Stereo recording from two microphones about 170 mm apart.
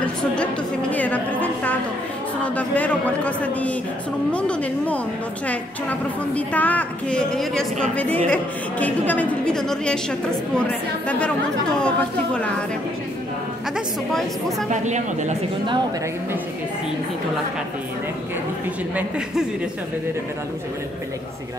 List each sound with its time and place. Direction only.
0.0 s a woman's voice: 5° left (ahead or behind)
14.7 s speech: 45° right (ahead or behind)
18.9 s speech: 5° right (ahead or behind)